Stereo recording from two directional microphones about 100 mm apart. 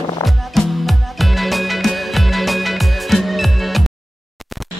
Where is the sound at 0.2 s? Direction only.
Centre (ahead or behind).